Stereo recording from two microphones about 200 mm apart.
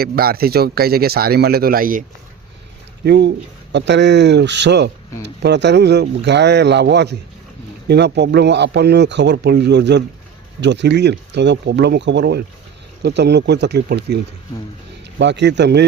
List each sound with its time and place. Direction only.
0.0 s speech: 50° right (ahead or behind)
3.0 s speech: 55° right (ahead or behind)
15.2 s speech: 60° right (ahead or behind)